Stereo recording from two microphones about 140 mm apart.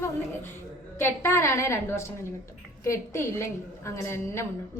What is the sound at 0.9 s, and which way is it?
A woman's voice, 15° left (ahead or behind).